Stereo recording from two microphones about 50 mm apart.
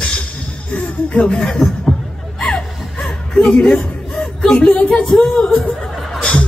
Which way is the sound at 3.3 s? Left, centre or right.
Centre.